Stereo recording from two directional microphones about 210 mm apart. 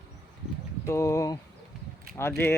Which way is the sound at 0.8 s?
15° left (ahead or behind).